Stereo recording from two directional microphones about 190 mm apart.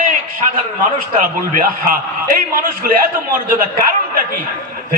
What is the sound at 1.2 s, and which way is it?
A man's voice, 50° right (ahead or behind).